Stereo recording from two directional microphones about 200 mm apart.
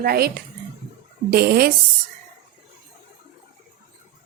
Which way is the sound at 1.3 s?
50° right (ahead or behind).